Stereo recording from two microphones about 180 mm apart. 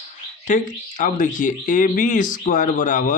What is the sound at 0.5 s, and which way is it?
Speech, 45° left (ahead or behind).